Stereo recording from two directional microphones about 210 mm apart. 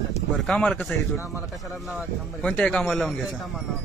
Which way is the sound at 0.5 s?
5° left (ahead or behind).